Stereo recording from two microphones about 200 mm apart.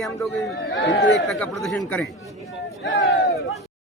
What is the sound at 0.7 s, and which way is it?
Speech, 65° left (ahead or behind).